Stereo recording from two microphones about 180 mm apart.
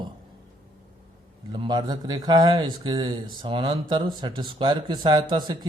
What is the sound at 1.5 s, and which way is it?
A man's voice, 25° right (ahead or behind).